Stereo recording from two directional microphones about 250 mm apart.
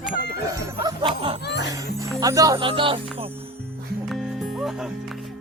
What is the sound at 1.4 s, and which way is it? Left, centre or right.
Music, left.